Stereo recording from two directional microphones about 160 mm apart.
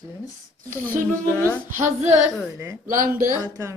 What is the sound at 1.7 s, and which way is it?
Female singing, 50° right (ahead or behind).